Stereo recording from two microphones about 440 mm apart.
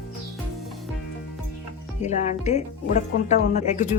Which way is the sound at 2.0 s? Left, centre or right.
Centre.